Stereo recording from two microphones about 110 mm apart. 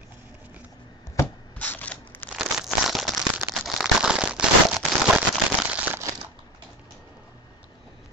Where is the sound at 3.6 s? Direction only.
5° right (ahead or behind).